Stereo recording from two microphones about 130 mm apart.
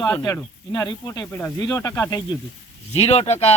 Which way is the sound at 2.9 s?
55° left (ahead or behind).